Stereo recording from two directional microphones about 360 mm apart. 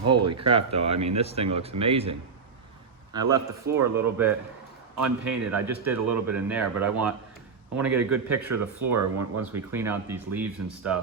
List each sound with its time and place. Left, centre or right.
0.3 s a man's voice: centre
3.1 s a man's voice: centre
9.0 s speech: right
9.4 s speech: centre